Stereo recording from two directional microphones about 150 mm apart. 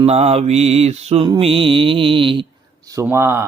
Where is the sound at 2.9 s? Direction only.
15° right (ahead or behind).